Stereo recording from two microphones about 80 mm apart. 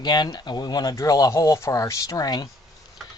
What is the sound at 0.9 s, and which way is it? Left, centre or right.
Speech, left.